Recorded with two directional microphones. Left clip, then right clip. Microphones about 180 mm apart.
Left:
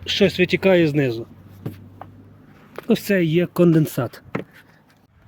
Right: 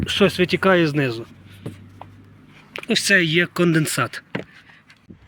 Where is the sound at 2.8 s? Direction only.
35° left (ahead or behind).